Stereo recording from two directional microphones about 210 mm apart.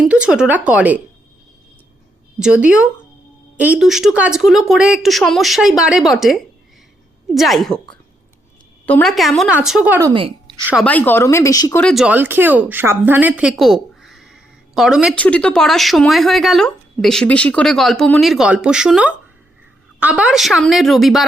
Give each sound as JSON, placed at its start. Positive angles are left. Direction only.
{"t": 0.0, "sound": "speech", "side_deg": -5}
{"t": 2.4, "sound": "speech", "side_deg": -5}
{"t": 10.2, "sound": "a woman's voice", "side_deg": -25}
{"t": 10.6, "sound": "speech", "side_deg": -5}
{"t": 10.8, "sound": "speech", "side_deg": 10}
{"t": 11.8, "sound": "speech", "side_deg": 0}